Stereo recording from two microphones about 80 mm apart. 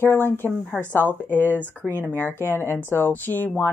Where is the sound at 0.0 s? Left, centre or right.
Left.